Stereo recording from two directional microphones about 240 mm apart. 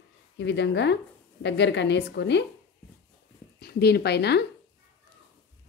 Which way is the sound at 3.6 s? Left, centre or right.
Left.